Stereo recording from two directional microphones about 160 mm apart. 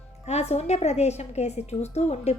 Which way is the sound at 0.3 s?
45° left (ahead or behind).